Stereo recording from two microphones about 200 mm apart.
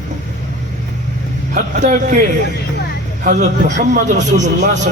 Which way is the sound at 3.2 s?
40° right (ahead or behind).